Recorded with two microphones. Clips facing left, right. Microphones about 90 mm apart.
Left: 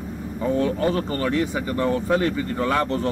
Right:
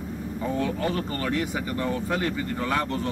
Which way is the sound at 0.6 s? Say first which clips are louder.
Left 5 dB; 35° left (ahead or behind).